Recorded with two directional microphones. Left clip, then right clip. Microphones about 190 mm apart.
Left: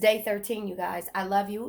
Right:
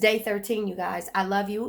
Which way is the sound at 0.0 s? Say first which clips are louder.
Right 1 dB; 20° right (ahead or behind).